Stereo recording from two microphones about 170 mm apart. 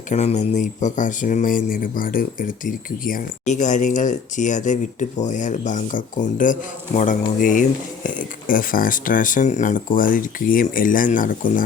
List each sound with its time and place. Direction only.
0.1 s speech: 45° left (ahead or behind)